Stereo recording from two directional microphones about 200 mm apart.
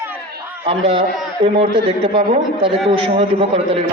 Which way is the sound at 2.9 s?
30° right (ahead or behind).